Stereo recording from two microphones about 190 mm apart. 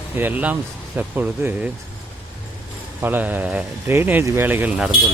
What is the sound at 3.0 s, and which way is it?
Speech, 10° right (ahead or behind).